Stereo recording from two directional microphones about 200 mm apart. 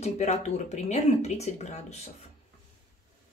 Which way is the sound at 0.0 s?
35° left (ahead or behind).